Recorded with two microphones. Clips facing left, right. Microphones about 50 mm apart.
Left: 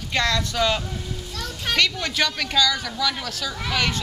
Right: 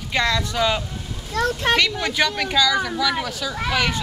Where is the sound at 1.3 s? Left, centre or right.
Right.